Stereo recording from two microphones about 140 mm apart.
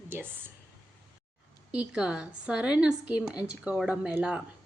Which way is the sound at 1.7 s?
10° right (ahead or behind).